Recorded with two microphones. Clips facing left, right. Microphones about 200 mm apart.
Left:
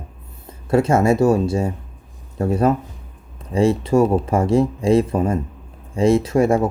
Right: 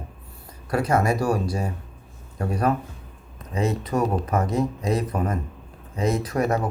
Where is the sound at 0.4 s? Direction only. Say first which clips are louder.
Left 8 dB; 25° left (ahead or behind).